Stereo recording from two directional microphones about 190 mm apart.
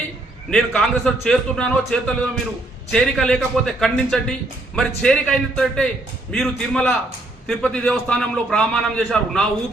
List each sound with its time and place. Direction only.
0.5 s a man's voice: 5° left (ahead or behind)